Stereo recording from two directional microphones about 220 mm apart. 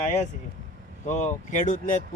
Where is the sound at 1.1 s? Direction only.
35° left (ahead or behind).